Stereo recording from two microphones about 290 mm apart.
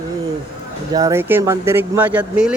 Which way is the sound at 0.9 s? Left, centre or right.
Centre.